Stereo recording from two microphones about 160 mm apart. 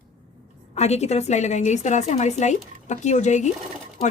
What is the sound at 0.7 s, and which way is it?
A woman's voice, 45° left (ahead or behind).